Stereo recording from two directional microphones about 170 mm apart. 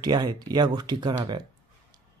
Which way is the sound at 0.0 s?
25° right (ahead or behind).